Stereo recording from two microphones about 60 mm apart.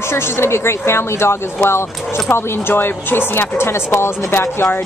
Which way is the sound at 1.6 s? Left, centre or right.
Left.